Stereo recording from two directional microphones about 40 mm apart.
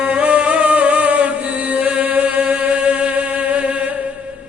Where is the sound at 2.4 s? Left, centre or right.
Right.